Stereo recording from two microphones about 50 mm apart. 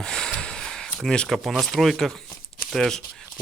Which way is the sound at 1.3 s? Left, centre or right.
Centre.